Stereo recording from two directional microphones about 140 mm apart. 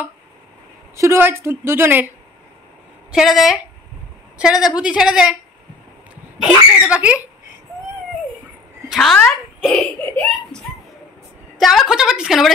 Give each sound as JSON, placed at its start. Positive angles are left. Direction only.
{"t": 0.9, "sound": "a woman's voice", "side_deg": -20}
{"t": 3.1, "sound": "a woman's voice", "side_deg": 0}
{"t": 4.6, "sound": "a woman's voice", "side_deg": -5}
{"t": 6.4, "sound": "a woman's voice", "side_deg": -5}
{"t": 8.8, "sound": "a woman's voice", "side_deg": 0}
{"t": 11.5, "sound": "a woman's voice", "side_deg": 0}